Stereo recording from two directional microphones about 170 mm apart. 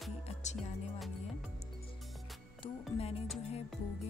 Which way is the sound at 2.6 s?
35° left (ahead or behind).